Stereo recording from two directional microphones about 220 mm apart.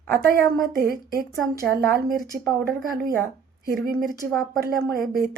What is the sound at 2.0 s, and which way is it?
Speech, centre (ahead or behind).